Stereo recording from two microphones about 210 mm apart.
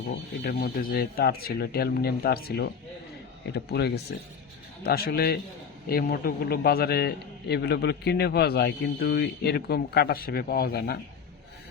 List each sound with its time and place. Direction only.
0.4 s a man's voice: 45° left (ahead or behind)